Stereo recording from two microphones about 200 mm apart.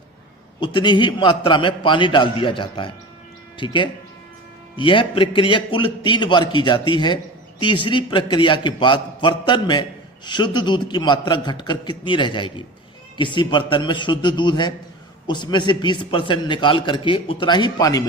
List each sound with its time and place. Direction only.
0.6 s a man's voice: 25° left (ahead or behind)